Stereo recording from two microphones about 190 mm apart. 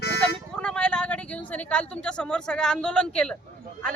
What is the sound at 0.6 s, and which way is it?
Speech, 5° left (ahead or behind).